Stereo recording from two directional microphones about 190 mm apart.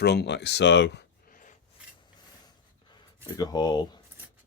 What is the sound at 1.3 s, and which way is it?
Filing, 45° left (ahead or behind).